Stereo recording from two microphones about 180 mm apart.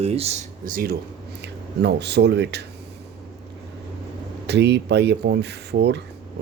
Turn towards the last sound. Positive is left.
turn(degrees=-65)  # may be behind; listen again after turning